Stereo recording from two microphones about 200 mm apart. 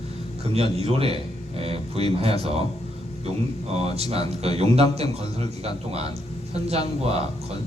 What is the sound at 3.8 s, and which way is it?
A man's voice, 30° right (ahead or behind).